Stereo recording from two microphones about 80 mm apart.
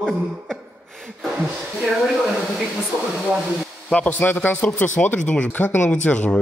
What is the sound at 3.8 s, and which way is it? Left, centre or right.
Speech, centre.